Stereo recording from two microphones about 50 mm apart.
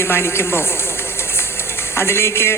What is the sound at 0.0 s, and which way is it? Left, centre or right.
Speech, left.